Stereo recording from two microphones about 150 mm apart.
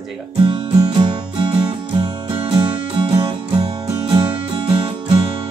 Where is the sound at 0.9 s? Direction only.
30° right (ahead or behind).